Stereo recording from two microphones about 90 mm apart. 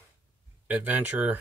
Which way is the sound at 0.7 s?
20° right (ahead or behind).